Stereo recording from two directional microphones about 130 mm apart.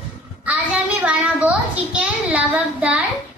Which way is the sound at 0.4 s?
10° right (ahead or behind).